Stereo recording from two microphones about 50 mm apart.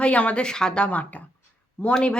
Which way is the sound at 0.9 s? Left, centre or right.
Left.